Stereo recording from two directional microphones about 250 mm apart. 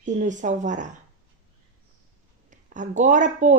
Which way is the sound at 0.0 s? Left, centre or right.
Right.